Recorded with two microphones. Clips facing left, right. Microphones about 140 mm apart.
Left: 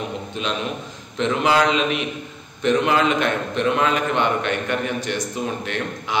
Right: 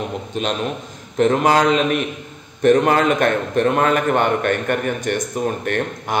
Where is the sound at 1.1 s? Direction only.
45° right (ahead or behind).